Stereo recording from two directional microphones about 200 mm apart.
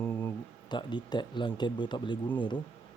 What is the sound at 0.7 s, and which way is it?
Speech, 20° left (ahead or behind).